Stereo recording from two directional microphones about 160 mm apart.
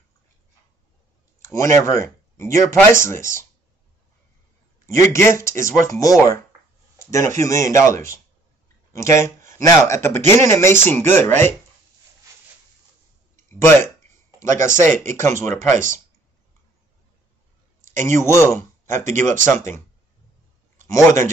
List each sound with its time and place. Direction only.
1.4 s speech: 20° left (ahead or behind)
4.8 s speech: 20° left (ahead or behind)
13.5 s speech: 15° left (ahead or behind)
18.1 s speech: 15° left (ahead or behind)
20.8 s a man's voice: 20° left (ahead or behind)